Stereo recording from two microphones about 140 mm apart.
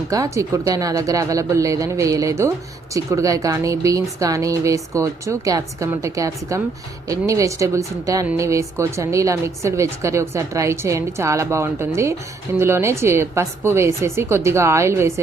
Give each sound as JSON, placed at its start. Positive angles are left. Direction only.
{"t": 0.1, "sound": "a woman's voice", "side_deg": -25}